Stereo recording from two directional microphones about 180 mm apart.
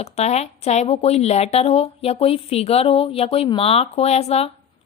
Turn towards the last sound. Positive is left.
turn(degrees=35)  # may be behind; listen again after turning